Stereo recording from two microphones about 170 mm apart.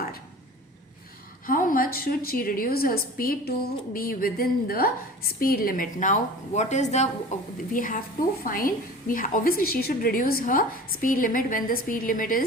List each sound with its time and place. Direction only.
1.5 s a woman's voice: 55° left (ahead or behind)